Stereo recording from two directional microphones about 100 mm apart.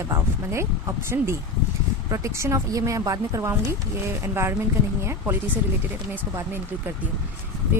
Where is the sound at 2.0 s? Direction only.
30° right (ahead or behind).